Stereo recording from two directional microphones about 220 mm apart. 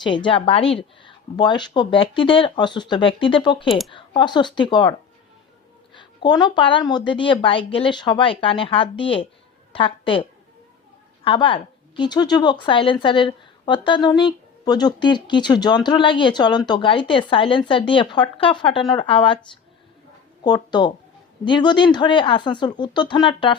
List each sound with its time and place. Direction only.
0.0 s a woman's voice: 20° left (ahead or behind)
3.7 s speech: centre (ahead or behind)
3.9 s a woman's voice: 20° left (ahead or behind)
20.4 s a woman's voice: 20° left (ahead or behind)